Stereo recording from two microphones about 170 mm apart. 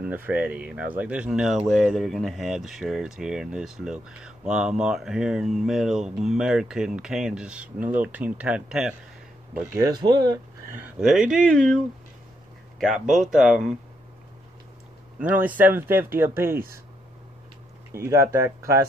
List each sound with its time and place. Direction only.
0.1 s speech: 10° right (ahead or behind)
9.8 s speech: 20° right (ahead or behind)
11.0 s speech: centre (ahead or behind)
15.1 s speech: 10° right (ahead or behind)
18.1 s speech: 15° right (ahead or behind)